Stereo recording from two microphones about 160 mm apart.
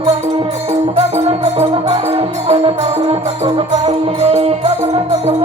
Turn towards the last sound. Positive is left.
turn(degrees=-40)  # may be behind; listen again after turning